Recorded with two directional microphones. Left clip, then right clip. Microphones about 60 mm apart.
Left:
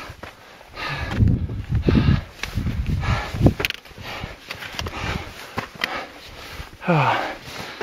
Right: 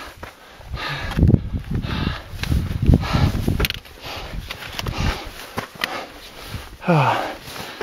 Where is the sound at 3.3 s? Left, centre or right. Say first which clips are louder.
Left 2 dB; right.